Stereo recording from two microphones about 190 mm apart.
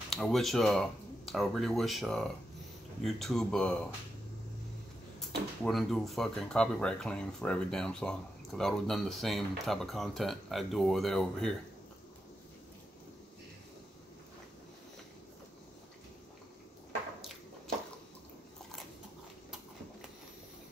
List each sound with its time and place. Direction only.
0.1 s speech: centre (ahead or behind)
5.2 s speech: centre (ahead or behind)
17.2 s a sound: centre (ahead or behind)